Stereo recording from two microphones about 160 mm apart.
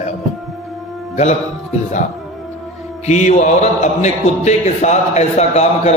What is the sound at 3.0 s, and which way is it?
A man's voice, 45° left (ahead or behind).